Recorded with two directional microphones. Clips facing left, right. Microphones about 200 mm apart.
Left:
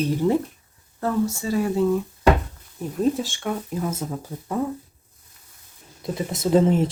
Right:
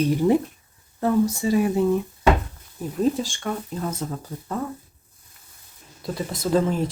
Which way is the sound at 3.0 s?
Centre (ahead or behind).